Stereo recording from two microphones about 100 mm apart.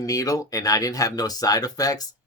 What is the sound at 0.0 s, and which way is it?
Speech, 35° left (ahead or behind).